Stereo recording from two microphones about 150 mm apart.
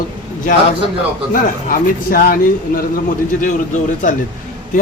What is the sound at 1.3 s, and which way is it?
Speech, 70° left (ahead or behind).